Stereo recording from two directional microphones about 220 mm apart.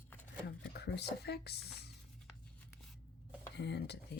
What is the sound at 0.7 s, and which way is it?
Speech, 50° left (ahead or behind).